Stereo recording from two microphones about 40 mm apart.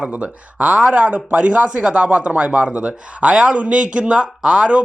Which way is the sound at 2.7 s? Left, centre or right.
Right.